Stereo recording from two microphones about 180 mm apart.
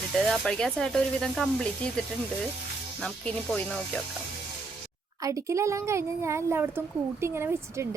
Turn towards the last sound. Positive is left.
turn(degrees=-15)  # may be behind; listen again after turning